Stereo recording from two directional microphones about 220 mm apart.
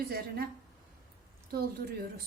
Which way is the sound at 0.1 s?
40° right (ahead or behind).